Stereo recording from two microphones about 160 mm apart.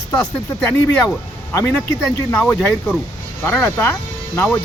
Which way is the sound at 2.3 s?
5° left (ahead or behind).